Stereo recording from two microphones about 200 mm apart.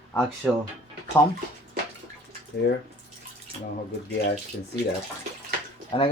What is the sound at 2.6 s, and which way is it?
Speech, 55° left (ahead or behind).